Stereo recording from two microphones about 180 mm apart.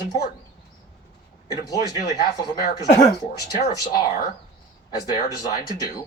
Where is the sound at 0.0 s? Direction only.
20° left (ahead or behind).